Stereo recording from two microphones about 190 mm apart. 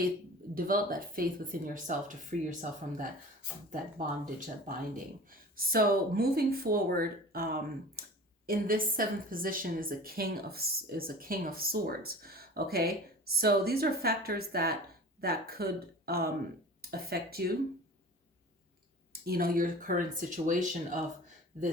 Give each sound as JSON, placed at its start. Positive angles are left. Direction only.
{"t": 0.5, "sound": "a woman's voice", "side_deg": -50}
{"t": 4.4, "sound": "a woman's voice", "side_deg": -45}
{"t": 19.2, "sound": "a woman's voice", "side_deg": -50}